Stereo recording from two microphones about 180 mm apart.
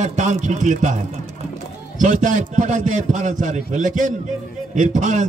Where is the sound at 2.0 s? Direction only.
45° right (ahead or behind).